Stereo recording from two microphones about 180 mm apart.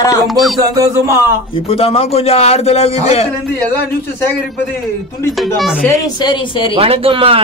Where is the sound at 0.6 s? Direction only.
20° right (ahead or behind).